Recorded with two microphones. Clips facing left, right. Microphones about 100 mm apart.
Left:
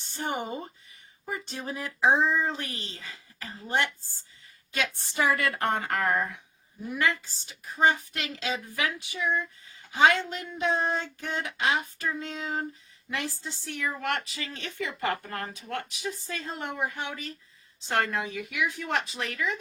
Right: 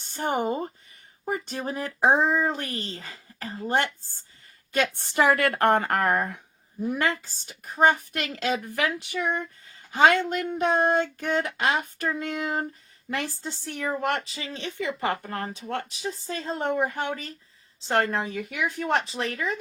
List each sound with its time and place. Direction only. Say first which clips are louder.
0.1 s speech: right 6 dB; 45° right (ahead or behind)
4.7 s speech: right 6 dB; 55° right (ahead or behind)
13.1 s a woman's voice: right 3 dB; 40° right (ahead or behind)
17.8 s a woman's voice: right 4 dB; 35° right (ahead or behind)